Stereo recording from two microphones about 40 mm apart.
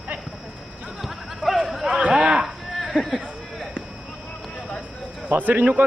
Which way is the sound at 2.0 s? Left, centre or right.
Right.